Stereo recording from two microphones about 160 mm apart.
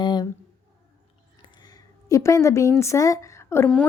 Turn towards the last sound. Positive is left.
turn(degrees=15)  # may be behind; listen again after turning